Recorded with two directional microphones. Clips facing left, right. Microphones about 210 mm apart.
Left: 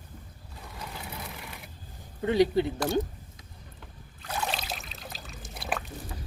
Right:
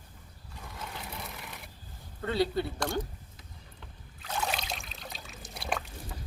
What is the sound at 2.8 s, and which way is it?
Speech, 5° left (ahead or behind).